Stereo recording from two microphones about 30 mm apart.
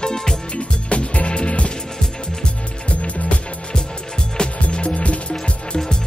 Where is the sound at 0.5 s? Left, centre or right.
Left.